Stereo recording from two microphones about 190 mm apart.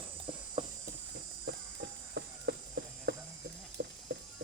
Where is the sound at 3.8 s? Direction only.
60° right (ahead or behind).